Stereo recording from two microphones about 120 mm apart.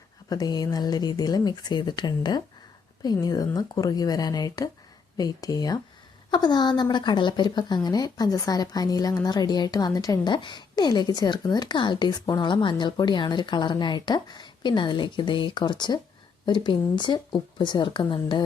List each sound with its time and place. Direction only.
0.3 s a woman's voice: 35° left (ahead or behind)